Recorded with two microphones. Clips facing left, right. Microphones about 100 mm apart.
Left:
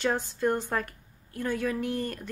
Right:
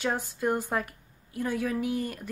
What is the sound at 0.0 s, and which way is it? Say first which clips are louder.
A woman's voice: left 2 dB; 5° right (ahead or behind).